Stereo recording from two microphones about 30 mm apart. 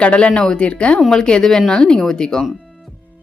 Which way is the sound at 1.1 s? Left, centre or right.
Left.